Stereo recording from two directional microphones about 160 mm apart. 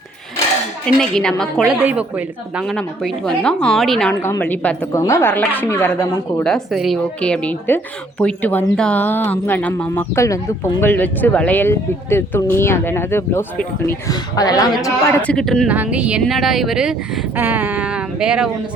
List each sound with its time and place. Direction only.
1.1 s a woman's voice: 5° left (ahead or behind)
2.7 s a woman's voice: 5° left (ahead or behind)
4.1 s speech: 15° left (ahead or behind)
4.9 s speech: 20° left (ahead or behind)
6.4 s a woman's voice: centre (ahead or behind); by 15.1 s 20° left (ahead or behind)
15.2 s a woman's voice: 5° left (ahead or behind)
15.7 s a woman's voice: 10° right (ahead or behind)